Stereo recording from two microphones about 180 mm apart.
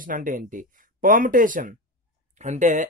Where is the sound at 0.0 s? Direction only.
45° right (ahead or behind).